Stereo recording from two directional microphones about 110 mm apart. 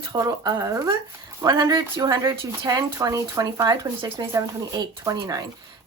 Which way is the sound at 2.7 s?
35° right (ahead or behind).